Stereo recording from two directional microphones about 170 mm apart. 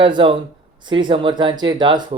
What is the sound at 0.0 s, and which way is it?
Speech, 30° right (ahead or behind).